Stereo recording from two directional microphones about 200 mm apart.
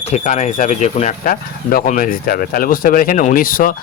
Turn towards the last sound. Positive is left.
turn(degrees=45)  # may be behind; listen again after turning